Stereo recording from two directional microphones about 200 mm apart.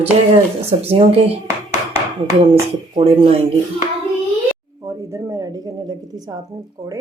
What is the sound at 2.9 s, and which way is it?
Speech, 30° right (ahead or behind).